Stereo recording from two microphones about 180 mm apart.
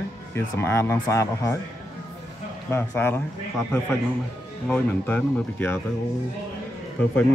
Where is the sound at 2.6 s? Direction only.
10° left (ahead or behind).